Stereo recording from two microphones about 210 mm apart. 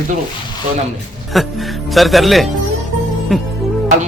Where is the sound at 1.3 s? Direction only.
Centre (ahead or behind).